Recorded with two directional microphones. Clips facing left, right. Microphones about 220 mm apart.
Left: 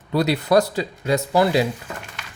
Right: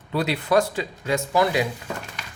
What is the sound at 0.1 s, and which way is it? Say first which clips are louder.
Speech: left 4 dB; 40° left (ahead or behind).